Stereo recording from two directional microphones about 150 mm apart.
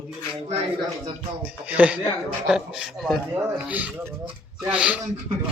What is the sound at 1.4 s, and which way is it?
Speech, 10° right (ahead or behind).